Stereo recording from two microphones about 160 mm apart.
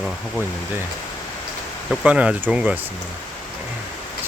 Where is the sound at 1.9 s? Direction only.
5° right (ahead or behind).